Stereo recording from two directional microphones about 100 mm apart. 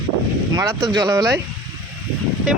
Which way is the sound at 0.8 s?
40° right (ahead or behind).